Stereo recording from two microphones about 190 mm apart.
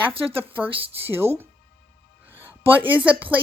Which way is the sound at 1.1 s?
10° right (ahead or behind).